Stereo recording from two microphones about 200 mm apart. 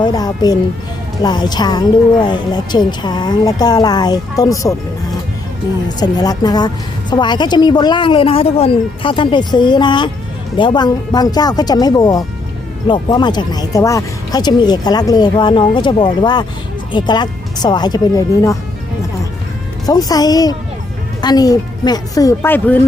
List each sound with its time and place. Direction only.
0.0 s a woman's voice: 20° left (ahead or behind)
6.0 s a woman's voice: 20° left (ahead or behind)
19.8 s a woman's voice: 20° left (ahead or behind)